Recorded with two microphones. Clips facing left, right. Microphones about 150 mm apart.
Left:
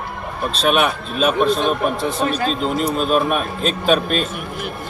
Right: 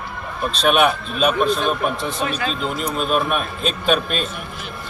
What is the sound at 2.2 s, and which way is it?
Speech, 40° left (ahead or behind).